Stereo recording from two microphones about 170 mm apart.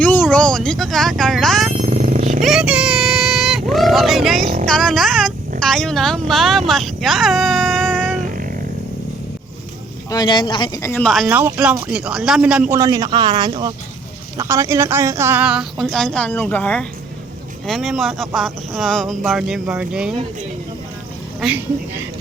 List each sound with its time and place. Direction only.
0.0 s a sound: 10° left (ahead or behind)
1.8 s vehicle: 50° right (ahead or behind)
2.4 s vehicle: 5° right (ahead or behind)
4.6 s music: 5° left (ahead or behind)
5.5 s speech: 5° left (ahead or behind)
10.1 s speech: 25° left (ahead or behind)
10.9 s a woman's voice: centre (ahead or behind)
11.3 s speech: 10° right (ahead or behind)
12.7 s a man's voice: 20° right (ahead or behind)
21.4 s speech: 10° right (ahead or behind)